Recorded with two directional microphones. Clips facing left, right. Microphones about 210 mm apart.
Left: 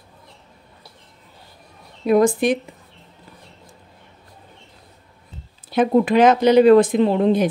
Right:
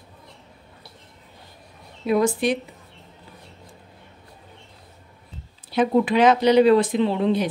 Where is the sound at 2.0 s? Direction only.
50° left (ahead or behind).